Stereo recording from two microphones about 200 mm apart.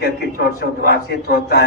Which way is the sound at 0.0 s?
55° left (ahead or behind).